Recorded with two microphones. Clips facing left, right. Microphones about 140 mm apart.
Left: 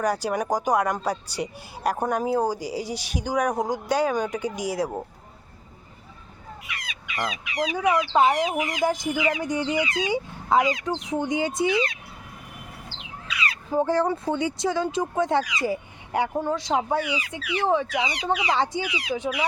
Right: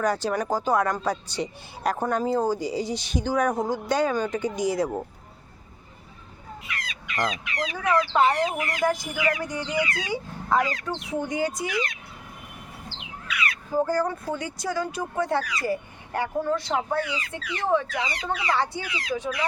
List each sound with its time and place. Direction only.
0.0 s speech: 10° left (ahead or behind)
6.7 s speech: 10° left (ahead or behind); by 11.9 s 30° left (ahead or behind)
13.2 s speech: 30° left (ahead or behind)